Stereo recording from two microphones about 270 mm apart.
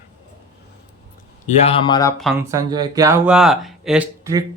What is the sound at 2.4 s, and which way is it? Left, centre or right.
Speech, centre.